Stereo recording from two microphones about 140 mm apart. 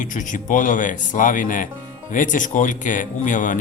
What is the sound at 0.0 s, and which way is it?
Speech, 65° left (ahead or behind).